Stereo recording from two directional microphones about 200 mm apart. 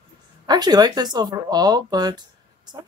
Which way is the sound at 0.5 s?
20° right (ahead or behind).